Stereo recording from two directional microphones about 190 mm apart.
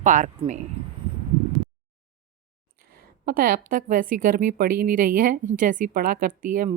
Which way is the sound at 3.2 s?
50° right (ahead or behind).